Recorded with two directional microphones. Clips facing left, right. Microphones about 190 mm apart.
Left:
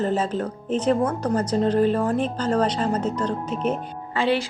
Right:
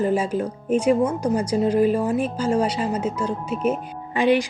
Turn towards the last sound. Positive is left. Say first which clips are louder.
# right 3 dB
turn(degrees=-15)  # may be behind; listen again after turning